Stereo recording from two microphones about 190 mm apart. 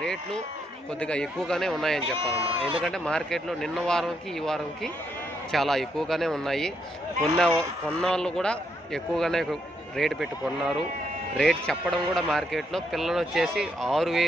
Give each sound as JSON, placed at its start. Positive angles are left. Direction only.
{"t": 0.0, "sound": "a man's voice", "side_deg": 5}
{"t": 2.1, "sound": "speech", "side_deg": -30}
{"t": 2.8, "sound": "a man's voice", "side_deg": 5}